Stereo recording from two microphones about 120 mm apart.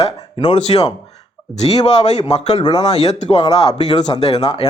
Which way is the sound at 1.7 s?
60° left (ahead or behind).